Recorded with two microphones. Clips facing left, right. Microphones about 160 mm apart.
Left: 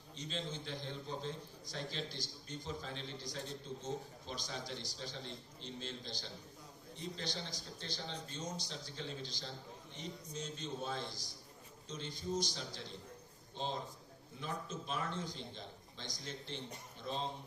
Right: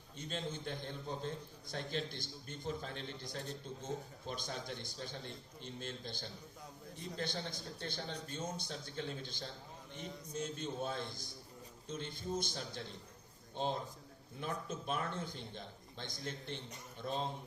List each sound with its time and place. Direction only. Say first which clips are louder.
0.2 s a man's voice: right 1 dB; 55° right (ahead or behind)